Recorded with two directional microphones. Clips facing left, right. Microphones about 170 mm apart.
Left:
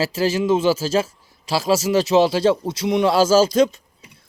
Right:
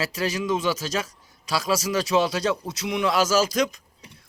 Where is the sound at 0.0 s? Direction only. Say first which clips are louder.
Left 7 dB; 30° left (ahead or behind).